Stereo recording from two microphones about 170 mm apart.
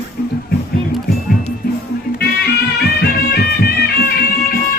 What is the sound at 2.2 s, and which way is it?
Music, 75° left (ahead or behind).